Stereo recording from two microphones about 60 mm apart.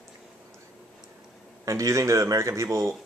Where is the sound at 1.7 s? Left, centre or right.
Right.